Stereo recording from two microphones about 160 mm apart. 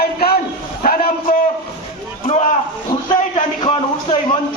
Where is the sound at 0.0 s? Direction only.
75° left (ahead or behind).